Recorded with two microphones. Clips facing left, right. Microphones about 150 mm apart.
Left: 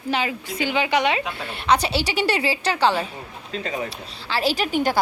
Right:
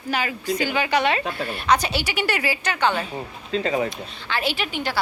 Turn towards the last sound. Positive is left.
turn(degrees=40)  # may be behind; listen again after turning